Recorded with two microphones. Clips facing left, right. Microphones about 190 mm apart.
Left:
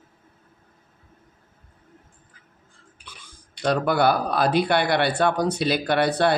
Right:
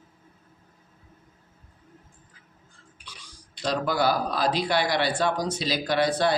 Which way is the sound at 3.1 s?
55° left (ahead or behind).